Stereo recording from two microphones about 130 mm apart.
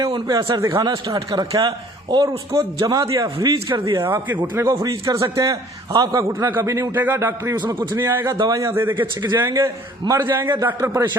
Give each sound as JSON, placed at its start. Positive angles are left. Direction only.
{"t": 0.0, "sound": "a man's voice", "side_deg": -35}
{"t": 0.6, "sound": "a man's voice", "side_deg": -25}
{"t": 3.2, "sound": "a man's voice", "side_deg": -35}
{"t": 3.9, "sound": "a man's voice", "side_deg": -20}
{"t": 7.5, "sound": "a man's voice", "side_deg": -35}
{"t": 7.8, "sound": "a man's voice", "side_deg": -15}